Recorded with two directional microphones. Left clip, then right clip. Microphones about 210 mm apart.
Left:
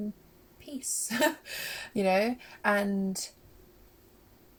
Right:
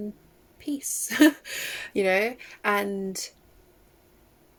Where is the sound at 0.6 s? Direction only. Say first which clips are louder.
Right 5 dB; 45° right (ahead or behind).